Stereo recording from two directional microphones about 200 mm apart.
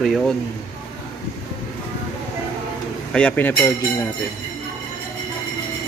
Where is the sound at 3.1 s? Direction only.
5° left (ahead or behind).